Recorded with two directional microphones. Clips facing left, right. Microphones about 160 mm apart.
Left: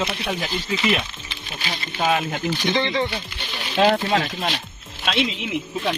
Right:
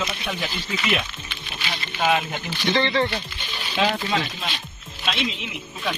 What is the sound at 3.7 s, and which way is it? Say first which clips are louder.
Speech: left 5 dB; 45° left (ahead or behind).